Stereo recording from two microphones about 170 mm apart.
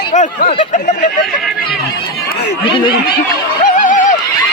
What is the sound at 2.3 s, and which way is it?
Chatter, 90° left.